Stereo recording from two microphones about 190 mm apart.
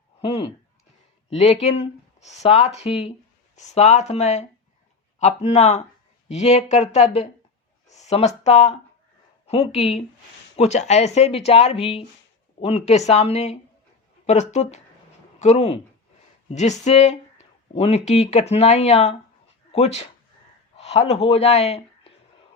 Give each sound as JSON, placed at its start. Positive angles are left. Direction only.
{"t": 0.2, "sound": "speech", "side_deg": 30}